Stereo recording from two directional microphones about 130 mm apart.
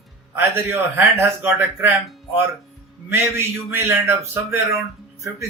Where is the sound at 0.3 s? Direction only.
20° right (ahead or behind).